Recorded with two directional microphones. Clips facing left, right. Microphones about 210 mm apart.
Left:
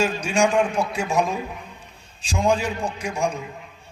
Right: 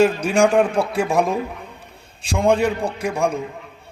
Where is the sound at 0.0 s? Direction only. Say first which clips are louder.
Right 5 dB; 60° right (ahead or behind).